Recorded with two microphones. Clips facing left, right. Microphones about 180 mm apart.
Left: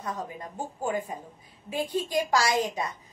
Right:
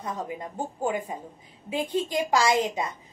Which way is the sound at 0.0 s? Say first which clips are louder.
Right 2 dB; 20° right (ahead or behind).